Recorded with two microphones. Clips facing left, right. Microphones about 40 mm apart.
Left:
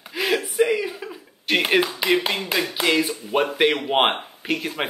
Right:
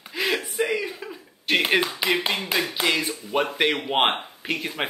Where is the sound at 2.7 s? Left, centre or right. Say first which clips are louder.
Left 3 dB; centre.